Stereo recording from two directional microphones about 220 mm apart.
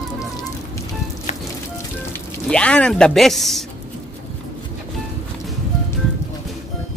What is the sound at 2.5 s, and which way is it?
Speech, 5° left (ahead or behind).